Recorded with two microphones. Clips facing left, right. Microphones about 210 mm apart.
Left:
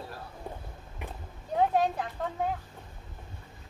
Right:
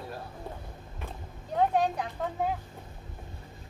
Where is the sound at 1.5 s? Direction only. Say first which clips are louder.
Even; 5° left (ahead or behind).